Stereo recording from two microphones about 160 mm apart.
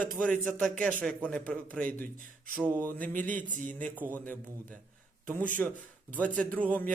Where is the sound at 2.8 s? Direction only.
10° left (ahead or behind).